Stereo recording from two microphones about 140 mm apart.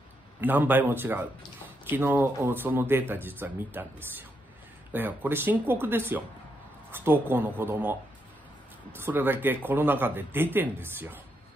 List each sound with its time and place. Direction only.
0.4 s speech: 15° right (ahead or behind)
8.9 s speech: 15° right (ahead or behind)